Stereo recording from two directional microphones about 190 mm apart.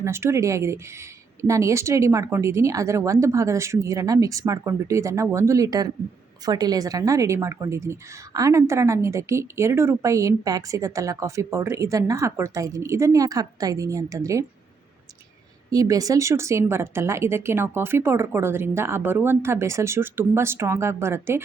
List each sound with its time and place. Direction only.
0.0 s a woman's voice: 15° right (ahead or behind)
15.7 s a woman's voice: 20° right (ahead or behind)